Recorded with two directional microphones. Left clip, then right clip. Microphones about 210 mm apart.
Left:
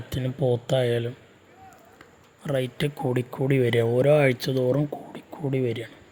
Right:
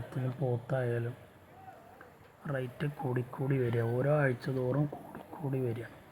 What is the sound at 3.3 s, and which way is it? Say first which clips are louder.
Speech: left 12 dB; 45° left (ahead or behind).